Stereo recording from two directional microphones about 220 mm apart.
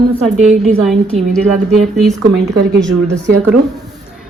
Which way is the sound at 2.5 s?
50° right (ahead or behind).